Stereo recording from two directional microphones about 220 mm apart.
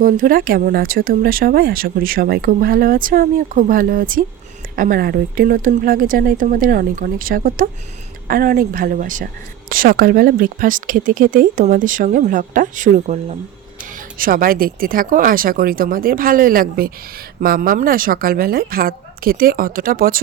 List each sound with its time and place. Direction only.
0.0 s speech: 40° right (ahead or behind)